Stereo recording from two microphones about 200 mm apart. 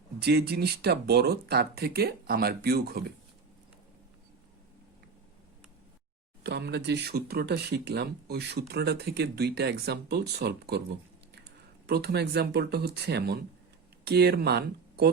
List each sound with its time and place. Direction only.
0.2 s speech: 55° right (ahead or behind)
6.4 s speech: 55° right (ahead or behind)
11.9 s speech: 55° right (ahead or behind)